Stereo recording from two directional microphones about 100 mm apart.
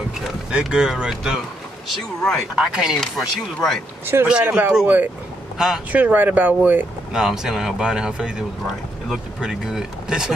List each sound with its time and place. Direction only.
0.5 s speech: 10° right (ahead or behind)
1.9 s speech: centre (ahead or behind)
2.5 s speech: 10° right (ahead or behind)
3.0 s speech: 5° left (ahead or behind)
4.0 s speech: 20° right (ahead or behind)
7.1 s speech: 5° right (ahead or behind)